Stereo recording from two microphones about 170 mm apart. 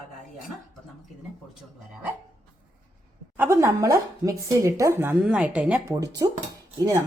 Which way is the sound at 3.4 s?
15° right (ahead or behind).